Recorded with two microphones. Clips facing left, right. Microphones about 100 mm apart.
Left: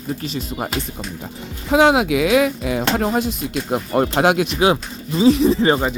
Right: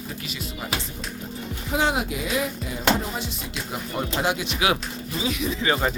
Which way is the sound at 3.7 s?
60° left (ahead or behind).